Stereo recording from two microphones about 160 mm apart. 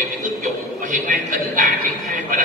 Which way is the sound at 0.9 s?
55° right (ahead or behind).